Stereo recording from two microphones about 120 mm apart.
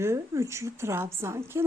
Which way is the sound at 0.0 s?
25° right (ahead or behind).